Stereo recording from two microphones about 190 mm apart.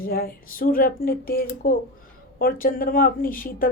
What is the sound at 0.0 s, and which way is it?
A woman's voice, 50° left (ahead or behind).